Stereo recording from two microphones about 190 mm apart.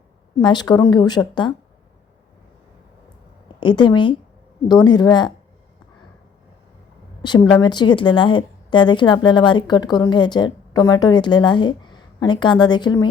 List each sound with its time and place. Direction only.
0.3 s a woman's voice: 20° left (ahead or behind)
3.6 s a woman's voice: 25° left (ahead or behind)
7.2 s a woman's voice: 25° left (ahead or behind)